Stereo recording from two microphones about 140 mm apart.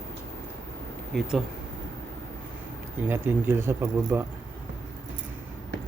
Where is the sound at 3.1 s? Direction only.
15° right (ahead or behind).